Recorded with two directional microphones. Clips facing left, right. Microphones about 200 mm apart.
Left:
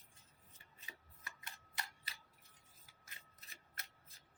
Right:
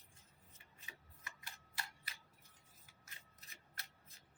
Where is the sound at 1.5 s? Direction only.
20° left (ahead or behind).